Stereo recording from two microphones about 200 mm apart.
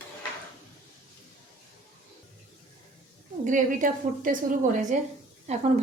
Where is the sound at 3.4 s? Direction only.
40° right (ahead or behind).